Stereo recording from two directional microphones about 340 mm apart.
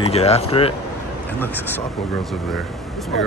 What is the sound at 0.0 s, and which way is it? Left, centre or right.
Speech, centre.